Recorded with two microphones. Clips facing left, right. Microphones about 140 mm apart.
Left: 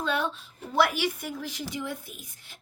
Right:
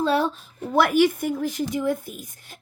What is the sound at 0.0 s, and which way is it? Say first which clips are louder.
A woman's voice: right 7 dB; 35° right (ahead or behind).